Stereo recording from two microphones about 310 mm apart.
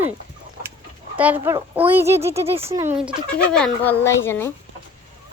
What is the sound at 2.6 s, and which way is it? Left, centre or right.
Speech, centre.